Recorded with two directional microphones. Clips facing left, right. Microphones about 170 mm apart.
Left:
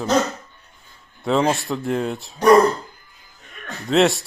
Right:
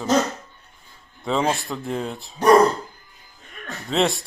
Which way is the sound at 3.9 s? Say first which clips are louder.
Left 5 dB; centre (ahead or behind).